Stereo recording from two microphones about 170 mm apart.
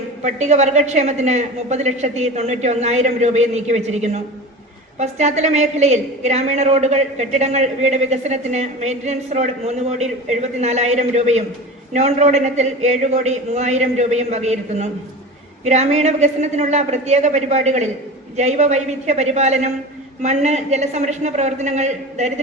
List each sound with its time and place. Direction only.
0.2 s a woman's voice: 45° right (ahead or behind)